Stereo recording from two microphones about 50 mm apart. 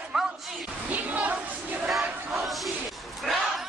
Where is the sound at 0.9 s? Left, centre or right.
Right.